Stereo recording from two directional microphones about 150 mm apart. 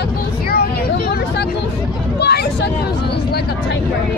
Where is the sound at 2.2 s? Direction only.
90° left.